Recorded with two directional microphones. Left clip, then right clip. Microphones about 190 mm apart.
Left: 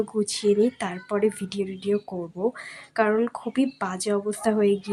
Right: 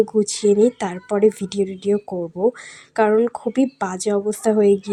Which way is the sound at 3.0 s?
15° right (ahead or behind).